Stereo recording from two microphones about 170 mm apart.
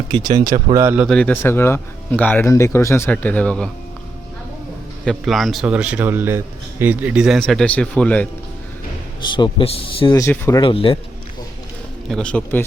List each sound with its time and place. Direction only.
0.5 s speech: 20° right (ahead or behind)
1.0 s speech: 5° left (ahead or behind)
5.0 s a man's voice: centre (ahead or behind)
9.3 s a man's voice: 30° left (ahead or behind)
10.2 s speech: 15° left (ahead or behind)
10.6 s a man's voice: 30° left (ahead or behind)
12.0 s speech: 5° left (ahead or behind)